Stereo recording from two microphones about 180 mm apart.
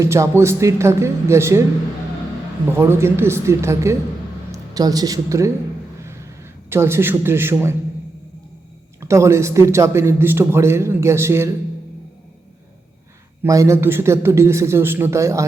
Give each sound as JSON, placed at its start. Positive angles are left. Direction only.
{"t": 0.0, "sound": "a man's voice", "side_deg": -15}
{"t": 2.7, "sound": "a man's voice", "side_deg": -15}
{"t": 6.7, "sound": "a man's voice", "side_deg": -15}
{"t": 9.0, "sound": "a man's voice", "side_deg": -15}
{"t": 13.4, "sound": "a man's voice", "side_deg": -15}